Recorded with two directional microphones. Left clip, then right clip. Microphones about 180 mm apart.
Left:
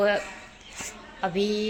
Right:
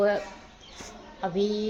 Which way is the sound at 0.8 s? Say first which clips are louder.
Left 4 dB; centre (ahead or behind).